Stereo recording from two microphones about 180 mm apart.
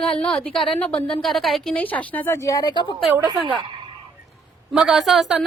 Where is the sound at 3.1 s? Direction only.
25° right (ahead or behind).